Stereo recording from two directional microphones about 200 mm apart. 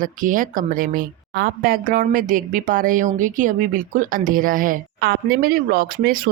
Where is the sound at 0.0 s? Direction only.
45° right (ahead or behind).